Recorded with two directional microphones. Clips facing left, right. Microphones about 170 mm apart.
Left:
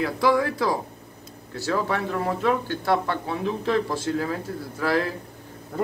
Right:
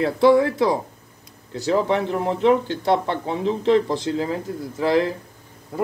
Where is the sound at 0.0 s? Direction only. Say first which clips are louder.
Right 6 dB; 25° right (ahead or behind).